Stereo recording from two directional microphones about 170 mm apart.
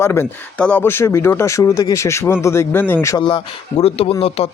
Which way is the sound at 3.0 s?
25° left (ahead or behind).